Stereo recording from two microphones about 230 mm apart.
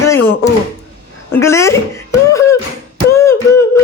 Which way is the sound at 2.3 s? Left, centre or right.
Centre.